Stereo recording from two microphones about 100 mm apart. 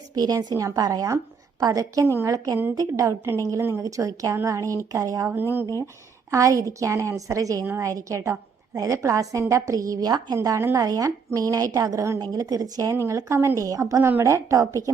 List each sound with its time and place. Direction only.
0.2 s a woman's voice: 40° right (ahead or behind)
6.3 s a woman's voice: 35° right (ahead or behind)
10.3 s a woman's voice: 30° right (ahead or behind)